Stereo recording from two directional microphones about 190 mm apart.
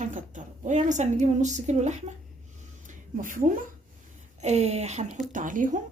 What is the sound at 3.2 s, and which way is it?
A woman's voice, 45° right (ahead or behind).